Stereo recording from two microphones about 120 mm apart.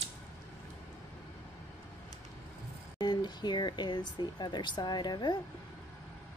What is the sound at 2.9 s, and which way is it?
Speech, 40° left (ahead or behind).